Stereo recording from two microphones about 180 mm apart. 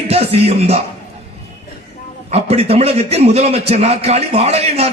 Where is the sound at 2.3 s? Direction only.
35° right (ahead or behind).